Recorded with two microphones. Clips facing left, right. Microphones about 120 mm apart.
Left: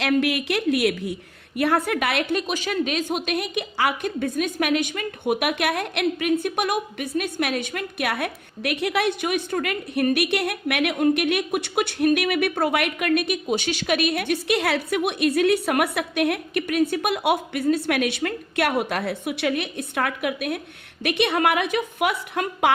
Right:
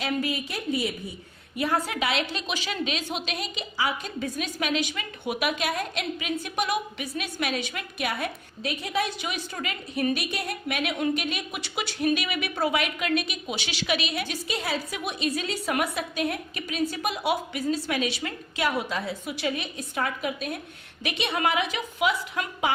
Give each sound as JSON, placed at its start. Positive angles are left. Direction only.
{"t": 0.0, "sound": "a woman's voice", "side_deg": 75}
{"t": 1.5, "sound": "speech", "side_deg": 65}
{"t": 10.9, "sound": "speech", "side_deg": 55}